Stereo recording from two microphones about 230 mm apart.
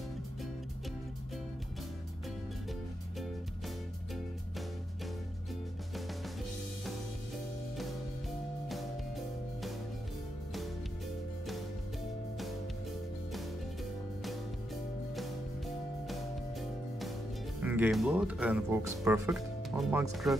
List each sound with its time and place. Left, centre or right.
8.6 s music: centre
17.6 s speech: centre